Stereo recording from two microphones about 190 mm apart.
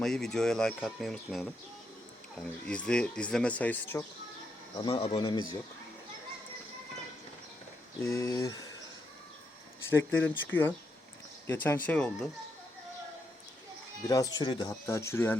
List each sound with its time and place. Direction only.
0.0 s speech: centre (ahead or behind)
2.6 s speech: 5° left (ahead or behind)
4.8 s speech: 25° left (ahead or behind)
8.0 s speech: 15° left (ahead or behind)
9.9 s speech: 10° left (ahead or behind)
14.1 s speech: 20° left (ahead or behind)